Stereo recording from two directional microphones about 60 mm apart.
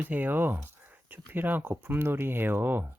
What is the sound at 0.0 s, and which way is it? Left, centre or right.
Speech, right.